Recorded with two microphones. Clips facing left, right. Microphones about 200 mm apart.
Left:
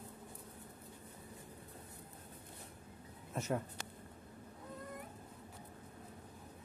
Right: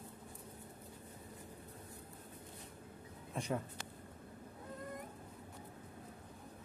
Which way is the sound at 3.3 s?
Centre (ahead or behind).